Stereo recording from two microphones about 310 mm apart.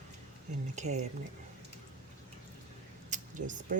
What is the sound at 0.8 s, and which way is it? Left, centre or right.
Speech, right.